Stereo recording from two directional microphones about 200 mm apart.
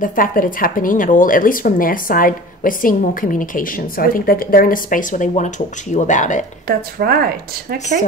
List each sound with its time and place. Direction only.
0.0 s a woman's voice: 45° left (ahead or behind)
6.7 s speech: 50° right (ahead or behind)